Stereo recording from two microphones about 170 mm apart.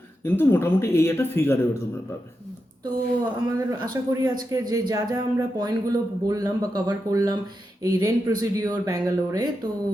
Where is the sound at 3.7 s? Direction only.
20° right (ahead or behind).